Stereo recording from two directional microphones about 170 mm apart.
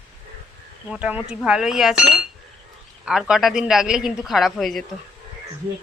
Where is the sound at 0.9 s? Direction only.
10° right (ahead or behind).